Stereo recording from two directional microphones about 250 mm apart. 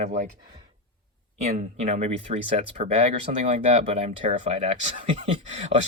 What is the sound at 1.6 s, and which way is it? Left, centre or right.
Speech, right.